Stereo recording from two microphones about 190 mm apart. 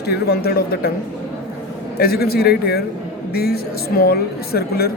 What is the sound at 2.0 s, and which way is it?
A woman's voice, 55° left (ahead or behind).